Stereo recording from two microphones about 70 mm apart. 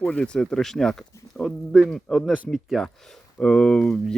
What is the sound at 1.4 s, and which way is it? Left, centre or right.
Speech, centre.